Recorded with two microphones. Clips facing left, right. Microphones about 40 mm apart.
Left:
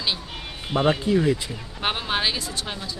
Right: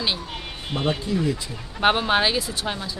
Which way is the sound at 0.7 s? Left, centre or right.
Centre.